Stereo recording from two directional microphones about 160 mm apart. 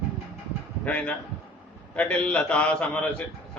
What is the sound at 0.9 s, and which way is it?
A man's voice, 10° left (ahead or behind).